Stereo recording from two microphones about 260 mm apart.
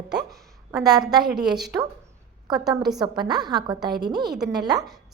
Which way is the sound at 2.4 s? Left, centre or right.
Centre.